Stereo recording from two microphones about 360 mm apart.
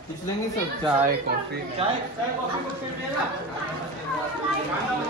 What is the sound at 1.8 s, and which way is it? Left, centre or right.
Speech, centre.